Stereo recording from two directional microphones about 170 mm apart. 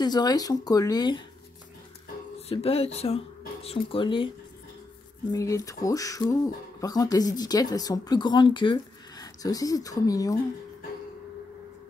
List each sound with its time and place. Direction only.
0.0 s speech: 25° left (ahead or behind)
2.4 s speech: 35° left (ahead or behind)
5.3 s speech: 20° left (ahead or behind)